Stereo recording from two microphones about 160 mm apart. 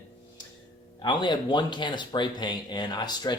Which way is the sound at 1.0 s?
30° left (ahead or behind).